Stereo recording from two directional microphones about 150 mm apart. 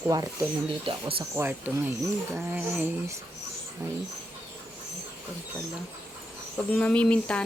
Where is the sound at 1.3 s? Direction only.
15° right (ahead or behind).